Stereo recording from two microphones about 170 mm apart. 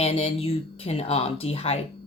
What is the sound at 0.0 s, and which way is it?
Speech, 35° left (ahead or behind).